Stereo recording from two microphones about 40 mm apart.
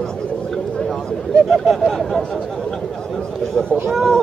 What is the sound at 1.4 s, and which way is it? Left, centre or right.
Speech, centre.